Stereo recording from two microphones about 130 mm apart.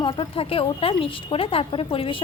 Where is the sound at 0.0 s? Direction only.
40° left (ahead or behind).